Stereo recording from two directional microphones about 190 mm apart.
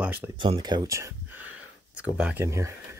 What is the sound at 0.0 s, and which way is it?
Speech, 10° right (ahead or behind).